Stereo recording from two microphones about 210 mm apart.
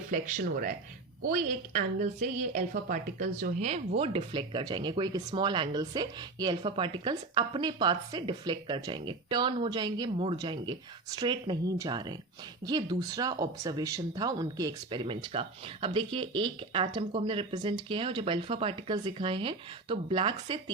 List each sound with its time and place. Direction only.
0.1 s a woman's voice: 40° right (ahead or behind); by 20.6 s 25° right (ahead or behind)